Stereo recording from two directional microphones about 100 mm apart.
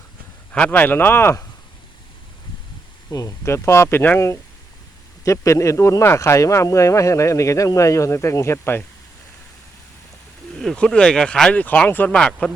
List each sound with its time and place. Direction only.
0.5 s speech: 15° left (ahead or behind)
3.1 s speech: 35° left (ahead or behind)
4.0 s speech: 15° left (ahead or behind)
5.2 s speech: 30° left (ahead or behind)
10.6 s speech: 5° left (ahead or behind)